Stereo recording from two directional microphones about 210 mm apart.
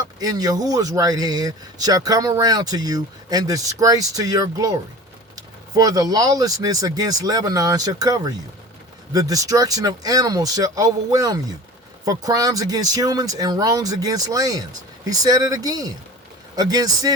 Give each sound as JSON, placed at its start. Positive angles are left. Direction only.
{"t": 0.2, "sound": "speech", "side_deg": -15}